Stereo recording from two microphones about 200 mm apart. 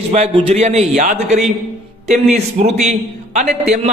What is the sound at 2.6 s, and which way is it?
Speech, 35° right (ahead or behind).